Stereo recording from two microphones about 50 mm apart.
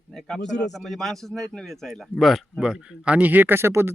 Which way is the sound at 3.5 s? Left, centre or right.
Right.